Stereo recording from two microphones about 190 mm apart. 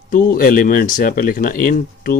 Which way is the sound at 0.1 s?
45° left (ahead or behind).